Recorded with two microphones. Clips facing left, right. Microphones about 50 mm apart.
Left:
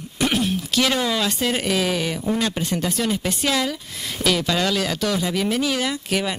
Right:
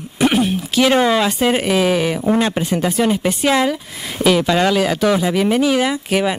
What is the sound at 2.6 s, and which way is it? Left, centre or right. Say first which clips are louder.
Speech: right 6 dB; centre.